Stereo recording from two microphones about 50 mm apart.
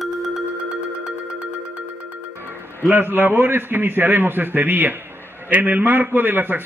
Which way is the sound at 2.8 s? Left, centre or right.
Right.